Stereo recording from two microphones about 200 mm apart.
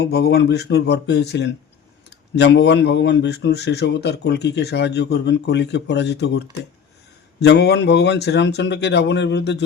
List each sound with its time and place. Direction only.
0.0 s speech: 55° left (ahead or behind)